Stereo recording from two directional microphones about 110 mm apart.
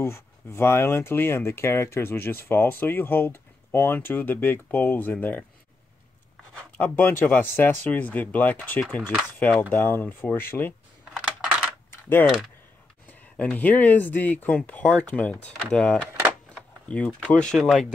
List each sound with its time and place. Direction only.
0.0 s speech: 25° left (ahead or behind)
6.8 s speech: 15° left (ahead or behind)
11.9 s mechanisms: 20° left (ahead or behind)
13.4 s speech: 15° left (ahead or behind)